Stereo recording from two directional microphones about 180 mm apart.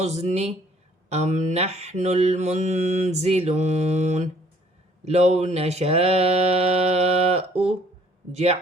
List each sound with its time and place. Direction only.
0.0 s mantra: 40° right (ahead or behind)